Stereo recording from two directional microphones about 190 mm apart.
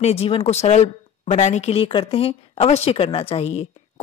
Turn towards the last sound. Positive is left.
turn(degrees=30)  # may be behind; listen again after turning